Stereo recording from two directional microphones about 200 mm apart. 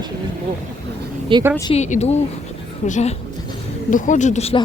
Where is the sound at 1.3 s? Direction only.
25° right (ahead or behind).